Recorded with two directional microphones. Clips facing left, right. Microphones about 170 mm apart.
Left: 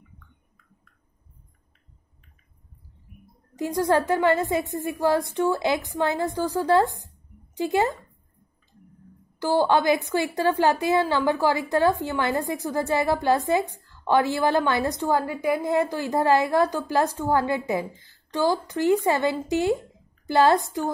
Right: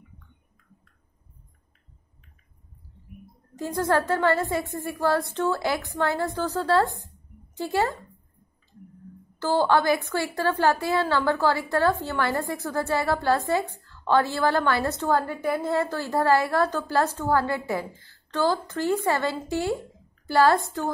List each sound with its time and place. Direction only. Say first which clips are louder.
3.5 s a woman's voice: left 2 dB; 15° left (ahead or behind)
9.4 s a woman's voice: left 1 dB; 15° left (ahead or behind)